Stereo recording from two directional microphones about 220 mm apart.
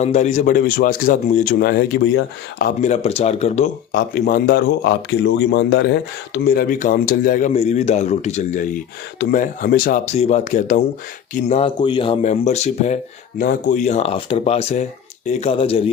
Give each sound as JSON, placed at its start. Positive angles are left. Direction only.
{"t": 0.0, "sound": "a man's voice", "side_deg": 30}
{"t": 2.8, "sound": "speech", "side_deg": 30}
{"t": 3.9, "sound": "a man's voice", "side_deg": 40}